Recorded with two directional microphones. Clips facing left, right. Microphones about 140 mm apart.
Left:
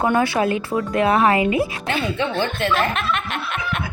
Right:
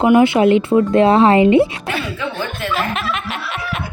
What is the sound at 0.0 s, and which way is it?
Speech, 20° right (ahead or behind).